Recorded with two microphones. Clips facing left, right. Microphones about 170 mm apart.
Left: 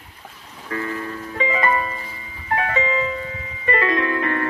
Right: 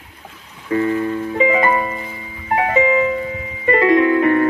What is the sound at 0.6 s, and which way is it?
Music, 30° right (ahead or behind).